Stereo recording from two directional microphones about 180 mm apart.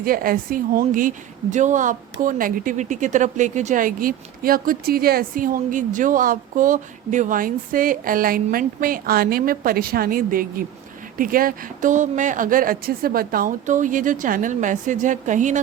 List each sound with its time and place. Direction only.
0.0 s a woman's voice: 55° right (ahead or behind)